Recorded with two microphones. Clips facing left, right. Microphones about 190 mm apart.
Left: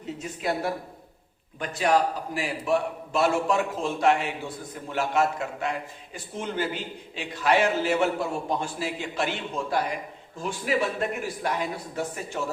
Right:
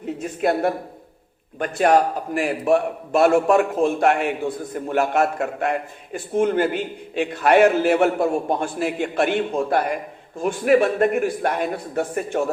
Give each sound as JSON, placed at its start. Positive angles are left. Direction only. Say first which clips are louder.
{"t": 0.0, "sound": "a woman's voice", "louder": "right 8 dB", "side_deg": -55}